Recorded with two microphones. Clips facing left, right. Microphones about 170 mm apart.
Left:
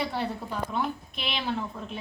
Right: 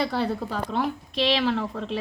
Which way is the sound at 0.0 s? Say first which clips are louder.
Right 5 dB; 90° right.